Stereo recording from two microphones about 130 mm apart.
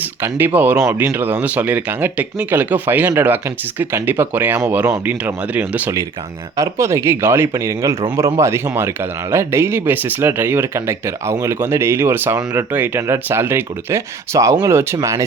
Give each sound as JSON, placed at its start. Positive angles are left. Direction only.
{"t": 0.2, "sound": "speech", "side_deg": -15}